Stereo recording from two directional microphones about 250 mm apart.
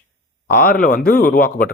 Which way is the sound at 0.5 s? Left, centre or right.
Left.